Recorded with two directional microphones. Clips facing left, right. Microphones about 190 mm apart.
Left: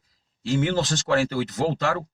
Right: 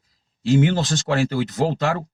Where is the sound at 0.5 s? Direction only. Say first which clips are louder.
Right 3 dB; 20° right (ahead or behind).